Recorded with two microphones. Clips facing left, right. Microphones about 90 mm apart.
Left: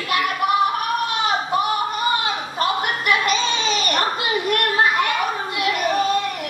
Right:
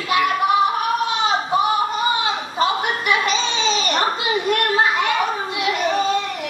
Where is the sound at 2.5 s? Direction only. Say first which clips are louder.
Right 2 dB; 20° right (ahead or behind).